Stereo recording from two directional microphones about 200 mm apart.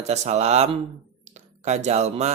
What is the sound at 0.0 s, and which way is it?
Speech, 35° right (ahead or behind).